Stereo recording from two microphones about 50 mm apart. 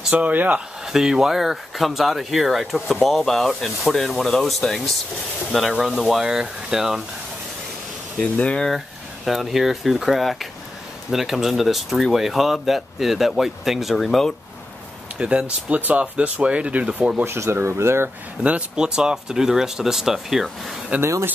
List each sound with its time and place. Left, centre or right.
0.1 s speech: right
0.8 s speech: centre
8.2 s speech: centre
8.6 s speech: centre
15.1 s speech: centre
15.7 s speech: right
17.2 s speech: right
18.4 s speech: right
18.9 s speech: centre
21.0 s speech: right